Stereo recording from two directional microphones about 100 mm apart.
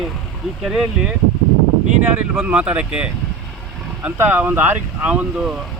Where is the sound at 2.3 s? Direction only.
10° right (ahead or behind).